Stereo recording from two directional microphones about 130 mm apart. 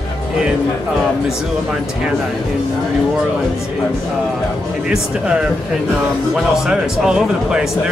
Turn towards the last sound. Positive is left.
turn(degrees=-5)  # may be behind; listen again after turning